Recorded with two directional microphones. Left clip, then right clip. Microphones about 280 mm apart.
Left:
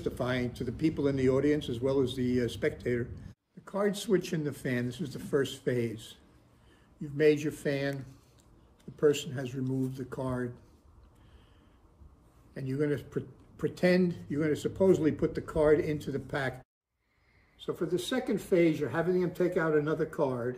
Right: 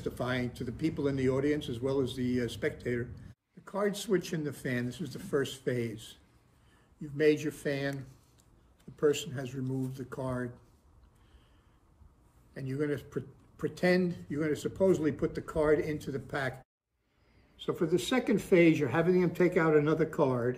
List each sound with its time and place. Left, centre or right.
0.0 s speech: centre
12.5 s speech: centre
17.6 s speech: centre